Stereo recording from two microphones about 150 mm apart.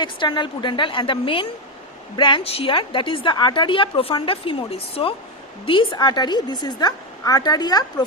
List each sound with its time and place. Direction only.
0.0 s a woman's voice: 30° left (ahead or behind)